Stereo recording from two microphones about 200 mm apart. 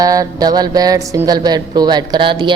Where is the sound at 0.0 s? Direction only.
15° right (ahead or behind).